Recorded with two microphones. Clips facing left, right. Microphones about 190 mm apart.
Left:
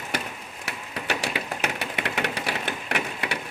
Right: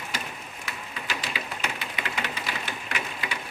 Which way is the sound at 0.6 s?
65° left (ahead or behind).